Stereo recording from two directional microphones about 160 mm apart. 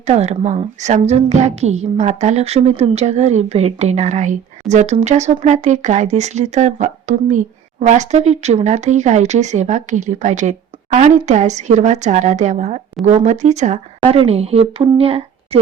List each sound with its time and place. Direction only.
0.1 s a woman's voice: 45° right (ahead or behind)